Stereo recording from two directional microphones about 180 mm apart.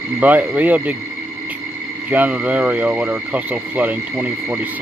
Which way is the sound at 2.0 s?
10° right (ahead or behind).